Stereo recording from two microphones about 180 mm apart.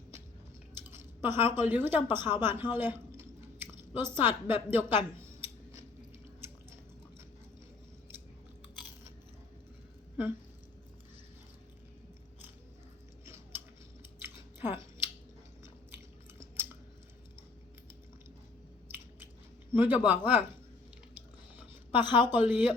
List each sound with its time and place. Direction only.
0.8 s speech: 10° right (ahead or behind)
2.4 s chewing: 10° right (ahead or behind)
13.2 s a sound: 15° right (ahead or behind)
14.2 s scissors: 10° right (ahead or behind)
19.8 s speech: 10° right (ahead or behind)
21.9 s speech: 10° right (ahead or behind)